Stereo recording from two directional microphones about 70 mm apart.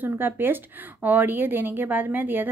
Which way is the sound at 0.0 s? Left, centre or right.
Right.